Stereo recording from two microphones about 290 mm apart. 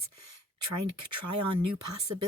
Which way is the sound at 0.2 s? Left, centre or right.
Right.